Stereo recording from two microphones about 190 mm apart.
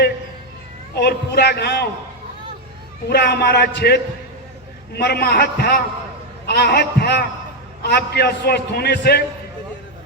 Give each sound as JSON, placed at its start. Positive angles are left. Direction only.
{"t": 0.9, "sound": "a man's voice", "side_deg": 60}
{"t": 3.1, "sound": "a man's voice", "side_deg": 60}